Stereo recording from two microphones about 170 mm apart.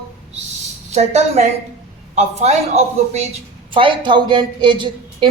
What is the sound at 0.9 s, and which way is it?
A woman's voice, 40° right (ahead or behind).